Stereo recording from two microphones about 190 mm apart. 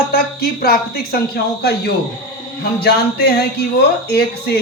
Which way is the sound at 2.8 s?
55° left (ahead or behind).